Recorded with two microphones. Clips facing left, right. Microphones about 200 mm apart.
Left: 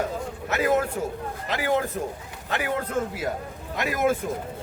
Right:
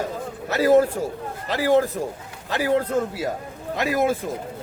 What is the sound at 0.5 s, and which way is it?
A man's voice, 35° right (ahead or behind).